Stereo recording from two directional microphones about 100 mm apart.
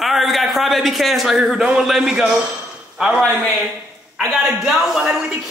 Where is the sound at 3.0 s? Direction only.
5° right (ahead or behind).